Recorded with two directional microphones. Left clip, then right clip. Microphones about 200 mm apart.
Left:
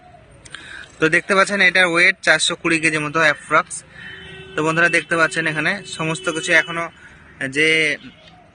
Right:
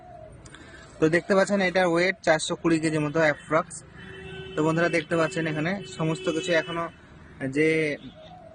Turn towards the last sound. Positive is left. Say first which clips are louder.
# left 7 dB
turn(degrees=-10)  # may be behind; listen again after turning